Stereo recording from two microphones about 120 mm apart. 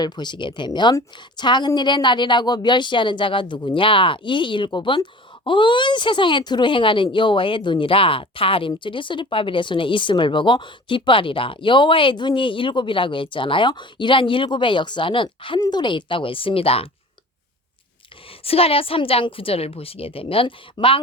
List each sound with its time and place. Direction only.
0.0 s a woman's voice: 40° left (ahead or behind)
18.4 s speech: 55° left (ahead or behind)